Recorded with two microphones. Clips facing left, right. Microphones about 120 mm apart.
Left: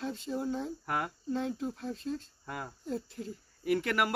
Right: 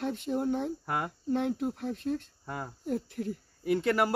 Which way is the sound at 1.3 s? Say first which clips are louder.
Right 5 dB; 60° right (ahead or behind).